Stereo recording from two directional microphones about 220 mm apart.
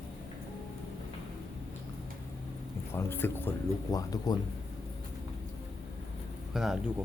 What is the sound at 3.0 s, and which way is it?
Speech, 10° left (ahead or behind).